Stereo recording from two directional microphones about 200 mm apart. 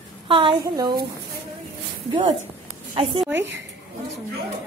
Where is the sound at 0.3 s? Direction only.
25° right (ahead or behind).